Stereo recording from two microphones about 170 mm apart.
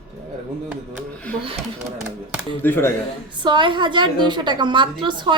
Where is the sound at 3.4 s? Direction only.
25° right (ahead or behind).